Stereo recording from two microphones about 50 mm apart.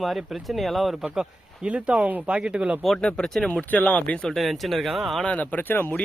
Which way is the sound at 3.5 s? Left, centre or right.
Left.